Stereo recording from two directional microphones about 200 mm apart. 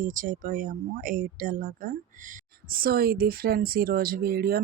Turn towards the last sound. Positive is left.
turn(degrees=-50)  # may be behind; listen again after turning